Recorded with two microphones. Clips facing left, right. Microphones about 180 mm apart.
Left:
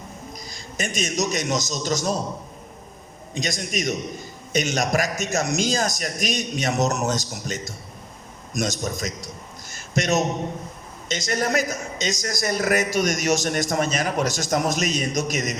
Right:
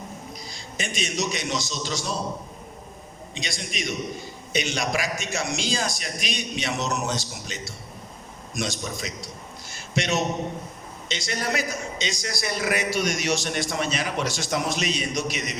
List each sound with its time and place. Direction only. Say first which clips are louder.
0.3 s a man's voice: left 5 dB; 45° left (ahead or behind)
3.3 s a man's voice: left 6 dB; 45° left (ahead or behind)
9.6 s a sound: left 3 dB; 45° left (ahead or behind)
11.1 s a man's voice: left 5 dB; 45° left (ahead or behind)